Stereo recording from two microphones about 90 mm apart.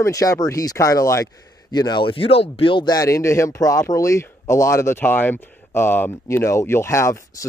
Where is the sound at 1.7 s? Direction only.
50° left (ahead or behind).